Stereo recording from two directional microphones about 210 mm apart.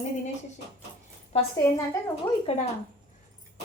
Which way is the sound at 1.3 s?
30° left (ahead or behind).